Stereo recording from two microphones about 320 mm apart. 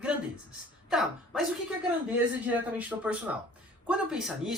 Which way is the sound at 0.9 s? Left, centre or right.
Centre.